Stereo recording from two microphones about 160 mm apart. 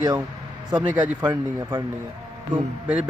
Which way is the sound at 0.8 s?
10° right (ahead or behind).